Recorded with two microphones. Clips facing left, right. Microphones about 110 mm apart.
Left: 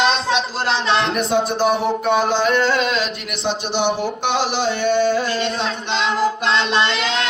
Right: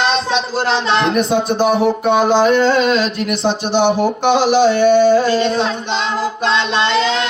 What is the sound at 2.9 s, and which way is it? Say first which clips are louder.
Speech: right 7 dB; 40° right (ahead or behind).